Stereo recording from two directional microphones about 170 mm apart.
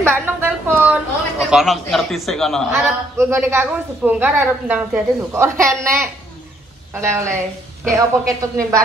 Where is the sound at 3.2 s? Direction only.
15° right (ahead or behind).